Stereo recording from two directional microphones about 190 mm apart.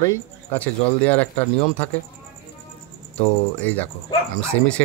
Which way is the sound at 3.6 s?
10° left (ahead or behind).